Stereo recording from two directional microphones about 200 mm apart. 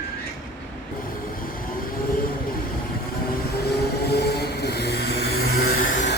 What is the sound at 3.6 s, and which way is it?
Vehicle, 55° left (ahead or behind).